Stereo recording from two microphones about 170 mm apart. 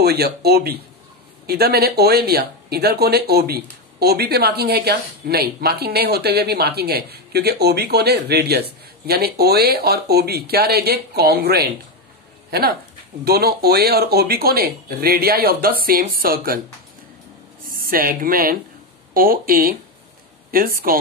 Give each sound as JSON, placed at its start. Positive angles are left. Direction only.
{"t": 0.0, "sound": "speech", "side_deg": -65}
{"t": 17.6, "sound": "speech", "side_deg": -55}